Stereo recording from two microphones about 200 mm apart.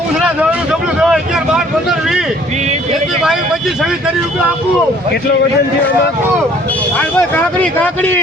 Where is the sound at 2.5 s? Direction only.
35° right (ahead or behind).